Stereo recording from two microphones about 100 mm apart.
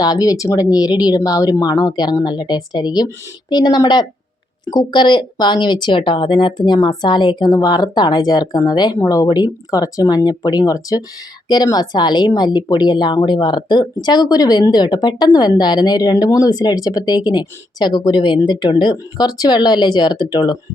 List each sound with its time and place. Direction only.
0.0 s a woman's voice: 40° left (ahead or behind)